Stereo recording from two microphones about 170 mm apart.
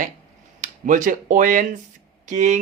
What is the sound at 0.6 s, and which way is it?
A man's voice, 50° right (ahead or behind).